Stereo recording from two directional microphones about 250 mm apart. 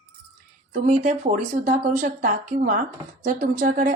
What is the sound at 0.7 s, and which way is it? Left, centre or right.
A woman's voice, right.